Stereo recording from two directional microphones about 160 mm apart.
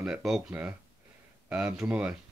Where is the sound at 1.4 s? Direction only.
5° right (ahead or behind).